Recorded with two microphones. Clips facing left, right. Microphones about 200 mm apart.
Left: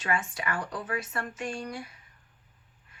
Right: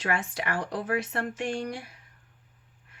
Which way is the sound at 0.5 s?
35° right (ahead or behind).